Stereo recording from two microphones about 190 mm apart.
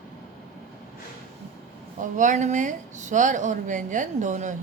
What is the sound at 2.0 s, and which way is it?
Speech, 40° right (ahead or behind).